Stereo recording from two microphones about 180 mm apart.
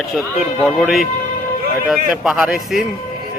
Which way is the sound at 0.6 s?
Centre (ahead or behind).